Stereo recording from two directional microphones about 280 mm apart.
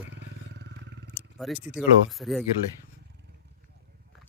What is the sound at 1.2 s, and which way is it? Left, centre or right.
A man's voice, centre.